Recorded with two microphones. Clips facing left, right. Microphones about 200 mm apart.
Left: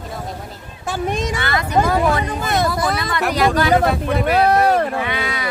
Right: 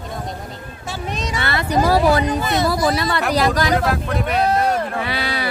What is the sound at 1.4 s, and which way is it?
Speech, 30° right (ahead or behind).